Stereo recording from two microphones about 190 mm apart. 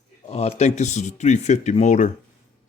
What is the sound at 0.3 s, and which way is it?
Speech, 35° left (ahead or behind).